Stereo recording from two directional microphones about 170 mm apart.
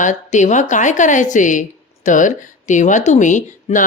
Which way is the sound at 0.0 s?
45° left (ahead or behind).